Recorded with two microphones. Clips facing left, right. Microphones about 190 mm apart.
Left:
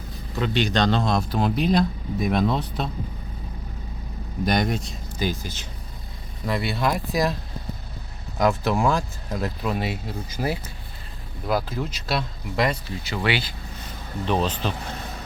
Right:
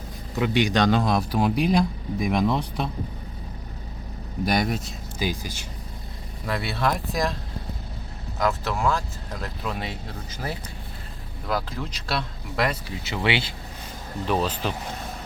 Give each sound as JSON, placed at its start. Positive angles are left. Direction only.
{"t": 0.3, "sound": "speech", "side_deg": -10}
{"t": 4.4, "sound": "speech", "side_deg": -5}
{"t": 6.4, "sound": "speech", "side_deg": 0}
{"t": 8.4, "sound": "speech", "side_deg": 15}
{"t": 12.9, "sound": "speech", "side_deg": -20}
{"t": 14.3, "sound": "speech", "side_deg": -5}